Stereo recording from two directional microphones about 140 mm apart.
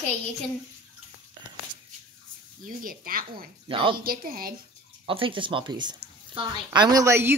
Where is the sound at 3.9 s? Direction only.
90° right.